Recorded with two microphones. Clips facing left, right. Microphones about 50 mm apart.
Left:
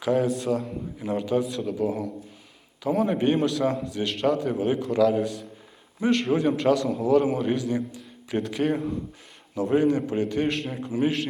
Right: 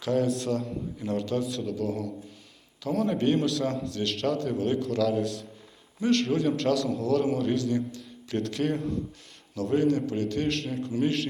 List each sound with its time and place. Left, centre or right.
0.0 s a man's voice: centre
6.0 s a man's voice: centre